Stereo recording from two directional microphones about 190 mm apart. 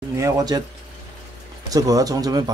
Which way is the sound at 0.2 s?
20° right (ahead or behind).